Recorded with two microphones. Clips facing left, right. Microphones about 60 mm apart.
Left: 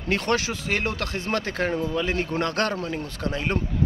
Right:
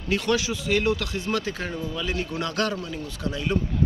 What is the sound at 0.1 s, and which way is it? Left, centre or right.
A man's voice, left.